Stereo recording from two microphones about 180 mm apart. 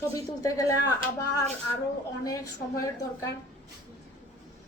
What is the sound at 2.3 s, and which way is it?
A woman's voice, 20° left (ahead or behind).